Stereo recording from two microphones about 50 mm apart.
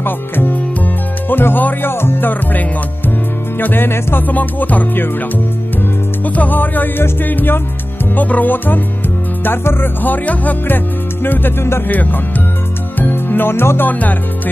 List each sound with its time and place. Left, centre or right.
0.0 s music: left
1.3 s speech: left
1.9 s music: left
4.3 s music: left
6.2 s music: left
11.2 s music: left
11.9 s music: left
13.1 s speech: left
13.8 s music: left